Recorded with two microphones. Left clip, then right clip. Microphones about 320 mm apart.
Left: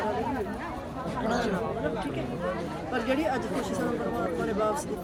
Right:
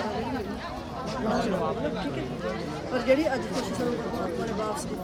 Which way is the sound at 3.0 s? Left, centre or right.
Centre.